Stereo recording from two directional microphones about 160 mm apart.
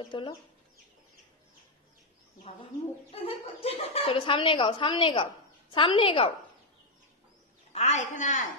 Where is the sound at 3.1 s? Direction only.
40° left (ahead or behind).